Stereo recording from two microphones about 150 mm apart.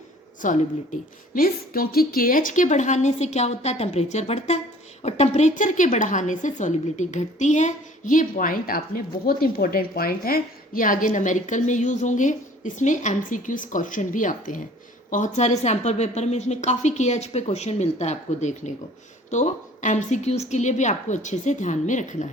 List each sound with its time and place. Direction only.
0.4 s a woman's voice: 60° left (ahead or behind)
1.3 s a woman's voice: 75° left (ahead or behind); by 22.3 s 55° left (ahead or behind)